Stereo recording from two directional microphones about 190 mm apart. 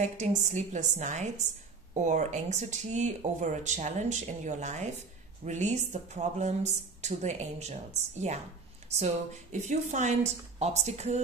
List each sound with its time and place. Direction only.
0.0 s speech: 40° right (ahead or behind)